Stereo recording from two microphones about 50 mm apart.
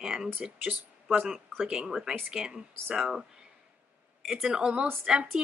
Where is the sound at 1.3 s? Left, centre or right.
Centre.